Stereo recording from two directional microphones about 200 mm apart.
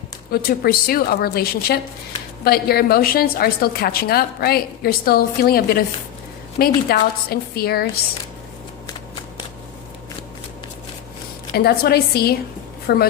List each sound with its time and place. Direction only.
0.3 s a woman's voice: 50° left (ahead or behind)
11.5 s a woman's voice: 50° left (ahead or behind)